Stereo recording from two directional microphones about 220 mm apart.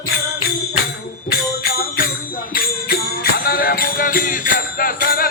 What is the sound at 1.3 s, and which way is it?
Music, 45° left (ahead or behind).